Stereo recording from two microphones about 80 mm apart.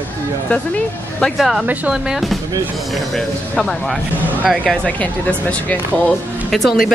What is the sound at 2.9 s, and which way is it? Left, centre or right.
Speech, centre.